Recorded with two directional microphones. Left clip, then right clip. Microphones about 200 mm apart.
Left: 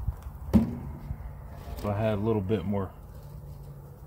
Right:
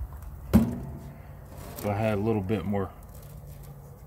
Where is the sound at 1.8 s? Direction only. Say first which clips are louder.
Right 1 dB; 20° left (ahead or behind).